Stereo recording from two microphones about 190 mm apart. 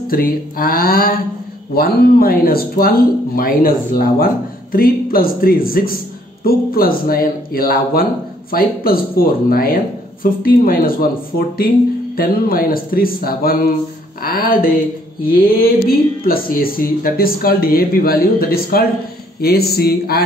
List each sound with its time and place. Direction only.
0.1 s speech: 50° left (ahead or behind)
16.2 s a man's voice: 50° left (ahead or behind)